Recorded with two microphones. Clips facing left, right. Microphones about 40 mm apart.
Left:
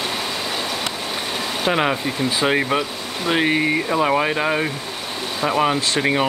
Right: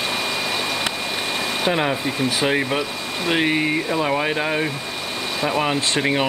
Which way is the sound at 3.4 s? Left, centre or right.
Centre.